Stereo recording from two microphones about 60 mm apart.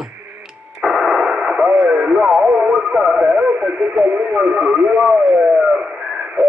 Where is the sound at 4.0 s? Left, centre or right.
Right.